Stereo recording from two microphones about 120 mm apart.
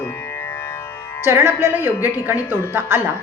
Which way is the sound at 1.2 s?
20° right (ahead or behind).